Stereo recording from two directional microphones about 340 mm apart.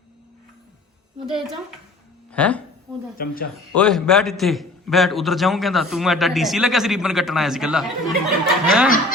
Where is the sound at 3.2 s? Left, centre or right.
Left.